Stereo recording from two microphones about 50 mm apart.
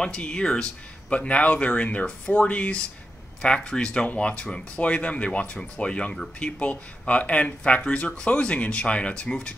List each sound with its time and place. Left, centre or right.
0.0 s speech: centre